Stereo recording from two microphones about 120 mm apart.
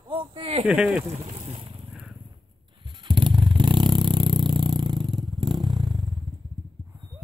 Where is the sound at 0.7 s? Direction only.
10° right (ahead or behind).